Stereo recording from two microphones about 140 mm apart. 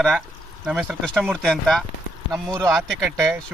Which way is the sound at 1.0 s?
Centre (ahead or behind).